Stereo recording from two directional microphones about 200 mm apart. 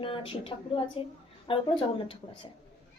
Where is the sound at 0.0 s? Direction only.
25° left (ahead or behind).